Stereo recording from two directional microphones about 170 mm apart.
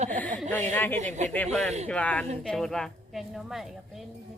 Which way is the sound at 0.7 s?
10° left (ahead or behind).